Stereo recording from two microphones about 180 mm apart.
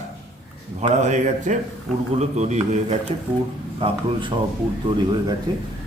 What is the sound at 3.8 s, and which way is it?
Speech, 30° right (ahead or behind).